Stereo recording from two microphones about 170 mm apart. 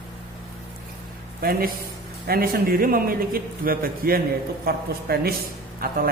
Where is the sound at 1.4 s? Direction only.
60° right (ahead or behind).